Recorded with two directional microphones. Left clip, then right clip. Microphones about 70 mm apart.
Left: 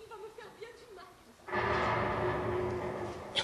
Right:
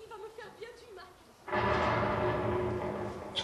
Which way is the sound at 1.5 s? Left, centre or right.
Centre.